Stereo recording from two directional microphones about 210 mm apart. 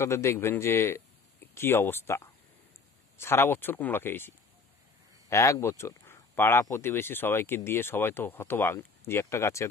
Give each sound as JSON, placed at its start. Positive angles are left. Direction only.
{"t": 0.0, "sound": "speech", "side_deg": 10}
{"t": 5.3, "sound": "speech", "side_deg": 15}